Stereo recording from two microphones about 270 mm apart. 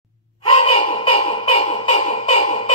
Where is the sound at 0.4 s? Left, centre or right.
Left.